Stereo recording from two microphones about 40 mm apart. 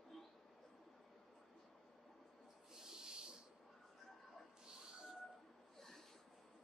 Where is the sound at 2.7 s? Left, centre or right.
Centre.